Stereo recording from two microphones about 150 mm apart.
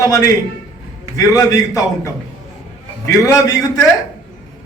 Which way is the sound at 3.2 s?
25° left (ahead or behind).